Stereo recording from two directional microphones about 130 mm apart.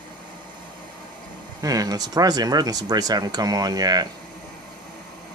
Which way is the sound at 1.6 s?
30° right (ahead or behind).